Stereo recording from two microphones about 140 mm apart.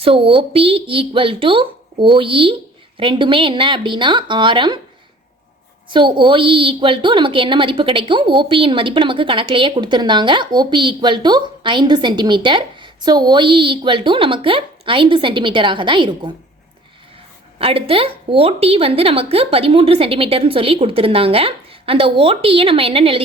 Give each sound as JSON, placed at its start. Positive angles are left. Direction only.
{"t": 0.0, "sound": "a woman's voice", "side_deg": -40}
{"t": 5.9, "sound": "a woman's voice", "side_deg": -35}
{"t": 17.6, "sound": "a woman's voice", "side_deg": -40}